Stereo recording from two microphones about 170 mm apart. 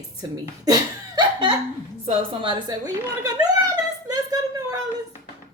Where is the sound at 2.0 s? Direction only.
30° right (ahead or behind).